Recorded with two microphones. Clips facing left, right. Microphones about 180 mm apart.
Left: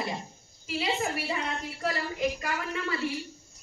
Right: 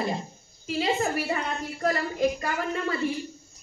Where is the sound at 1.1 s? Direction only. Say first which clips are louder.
Right 4 dB; 45° right (ahead or behind).